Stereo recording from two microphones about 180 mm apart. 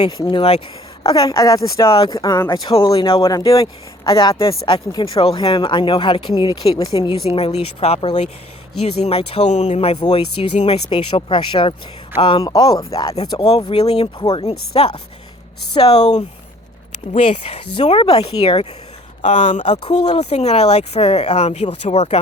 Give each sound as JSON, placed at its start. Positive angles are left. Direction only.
{"t": 0.0, "sound": "speech", "side_deg": 25}
{"t": 7.3, "sound": "speech", "side_deg": 35}
{"t": 16.0, "sound": "speech", "side_deg": 40}